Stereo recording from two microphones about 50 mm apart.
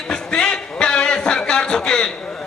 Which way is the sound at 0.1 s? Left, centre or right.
Centre.